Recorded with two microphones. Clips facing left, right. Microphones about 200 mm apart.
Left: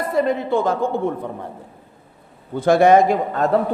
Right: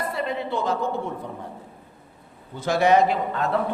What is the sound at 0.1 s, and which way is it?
Speech, 45° left (ahead or behind).